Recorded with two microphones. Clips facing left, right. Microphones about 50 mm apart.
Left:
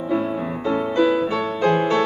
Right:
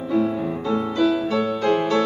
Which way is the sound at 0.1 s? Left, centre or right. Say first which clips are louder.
Right 2 dB; left.